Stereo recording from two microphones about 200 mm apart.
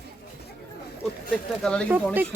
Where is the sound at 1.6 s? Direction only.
5° left (ahead or behind).